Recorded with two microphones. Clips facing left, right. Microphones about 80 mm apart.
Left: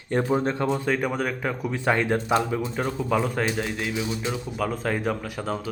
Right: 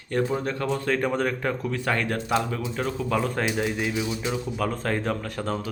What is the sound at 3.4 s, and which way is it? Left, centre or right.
Speech, centre.